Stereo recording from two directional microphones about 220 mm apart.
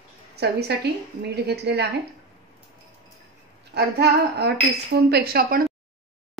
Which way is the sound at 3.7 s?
50° right (ahead or behind).